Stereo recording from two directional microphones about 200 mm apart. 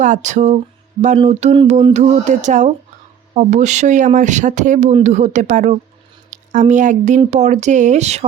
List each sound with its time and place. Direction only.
0.0 s speech: 40° right (ahead or behind)